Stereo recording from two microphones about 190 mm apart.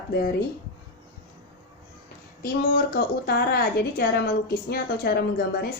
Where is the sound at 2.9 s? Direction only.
55° left (ahead or behind).